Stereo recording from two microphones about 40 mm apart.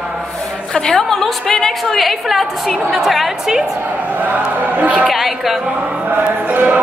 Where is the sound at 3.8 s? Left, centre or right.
Right.